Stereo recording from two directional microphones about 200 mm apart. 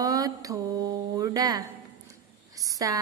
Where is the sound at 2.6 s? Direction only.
15° right (ahead or behind).